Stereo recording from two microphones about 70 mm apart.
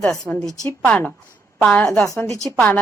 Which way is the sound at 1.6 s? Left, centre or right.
Centre.